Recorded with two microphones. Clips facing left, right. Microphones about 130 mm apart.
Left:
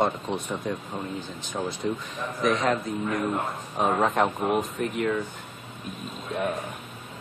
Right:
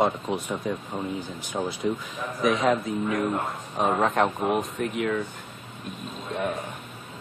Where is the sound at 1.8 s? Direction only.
Centre (ahead or behind).